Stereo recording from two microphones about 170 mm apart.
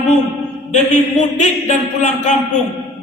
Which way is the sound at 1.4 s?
45° left (ahead or behind).